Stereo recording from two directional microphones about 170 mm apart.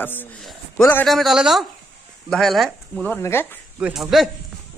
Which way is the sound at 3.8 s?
Centre (ahead or behind).